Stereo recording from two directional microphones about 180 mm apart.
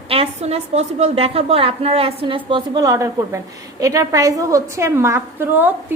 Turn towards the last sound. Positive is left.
turn(degrees=-10)  # may be behind; listen again after turning